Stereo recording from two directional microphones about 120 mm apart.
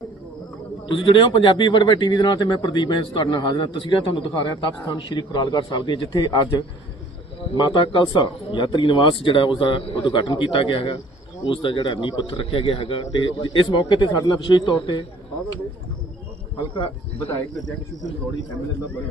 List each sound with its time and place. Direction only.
0.9 s speech: 45° left (ahead or behind)
7.5 s speech: 40° left (ahead or behind)